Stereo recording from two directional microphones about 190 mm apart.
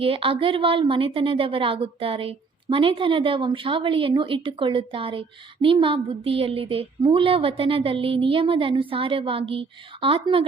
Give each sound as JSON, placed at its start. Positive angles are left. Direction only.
{"t": 0.0, "sound": "a woman's voice", "side_deg": -30}